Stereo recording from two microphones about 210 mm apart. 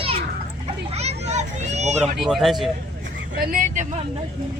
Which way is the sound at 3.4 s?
40° right (ahead or behind).